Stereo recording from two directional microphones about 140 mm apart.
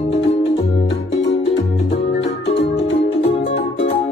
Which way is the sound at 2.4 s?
50° left (ahead or behind).